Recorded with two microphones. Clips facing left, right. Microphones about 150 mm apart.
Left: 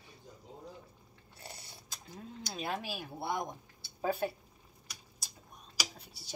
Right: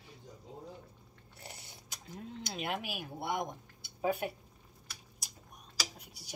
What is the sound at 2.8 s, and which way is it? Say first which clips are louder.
Speech: even; 15° right (ahead or behind).